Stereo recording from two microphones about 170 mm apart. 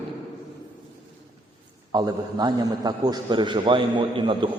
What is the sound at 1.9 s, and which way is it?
A man's voice, 25° right (ahead or behind).